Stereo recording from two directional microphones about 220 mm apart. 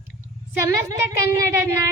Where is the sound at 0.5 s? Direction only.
10° right (ahead or behind).